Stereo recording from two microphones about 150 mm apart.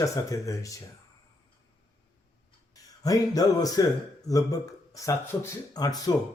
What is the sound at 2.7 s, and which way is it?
Speech, 25° left (ahead or behind).